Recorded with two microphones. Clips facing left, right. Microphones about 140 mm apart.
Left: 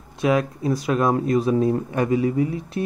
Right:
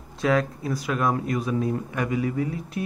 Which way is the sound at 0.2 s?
15° left (ahead or behind).